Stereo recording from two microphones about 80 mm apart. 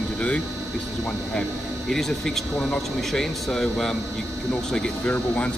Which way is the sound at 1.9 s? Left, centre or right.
Centre.